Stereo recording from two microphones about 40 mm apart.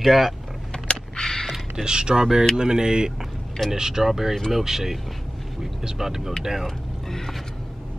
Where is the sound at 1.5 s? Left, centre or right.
Centre.